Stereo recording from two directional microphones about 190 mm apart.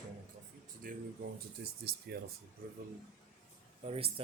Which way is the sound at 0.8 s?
50° right (ahead or behind).